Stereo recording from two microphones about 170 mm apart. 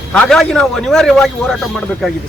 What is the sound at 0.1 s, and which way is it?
A man's voice, 5° left (ahead or behind).